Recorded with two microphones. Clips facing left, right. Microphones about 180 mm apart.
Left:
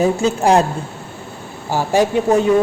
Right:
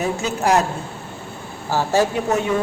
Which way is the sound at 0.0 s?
30° left (ahead or behind).